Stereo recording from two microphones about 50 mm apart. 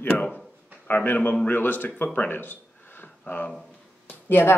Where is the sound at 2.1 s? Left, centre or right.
Left.